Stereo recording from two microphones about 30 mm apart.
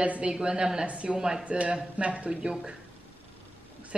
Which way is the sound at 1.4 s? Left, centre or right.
Right.